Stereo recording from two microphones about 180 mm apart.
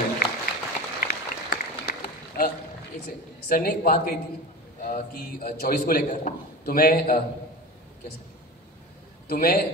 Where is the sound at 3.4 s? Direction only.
55° left (ahead or behind).